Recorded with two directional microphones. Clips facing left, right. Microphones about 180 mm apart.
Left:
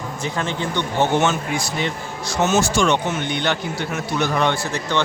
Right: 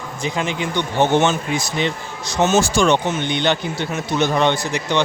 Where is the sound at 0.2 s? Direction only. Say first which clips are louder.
Right 3 dB; 15° right (ahead or behind).